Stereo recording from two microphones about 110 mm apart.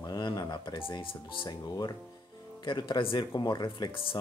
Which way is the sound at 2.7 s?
45° left (ahead or behind).